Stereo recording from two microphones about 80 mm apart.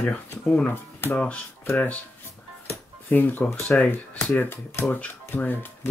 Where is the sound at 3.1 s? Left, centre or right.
Left.